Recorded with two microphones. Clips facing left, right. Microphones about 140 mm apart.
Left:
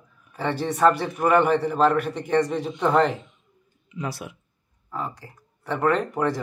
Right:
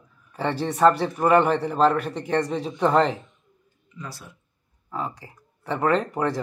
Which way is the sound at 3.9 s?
70° left (ahead or behind).